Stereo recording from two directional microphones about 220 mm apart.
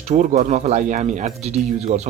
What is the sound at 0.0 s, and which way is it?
Speech, 30° right (ahead or behind).